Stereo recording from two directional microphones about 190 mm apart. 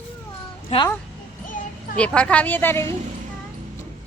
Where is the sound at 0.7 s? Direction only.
35° left (ahead or behind).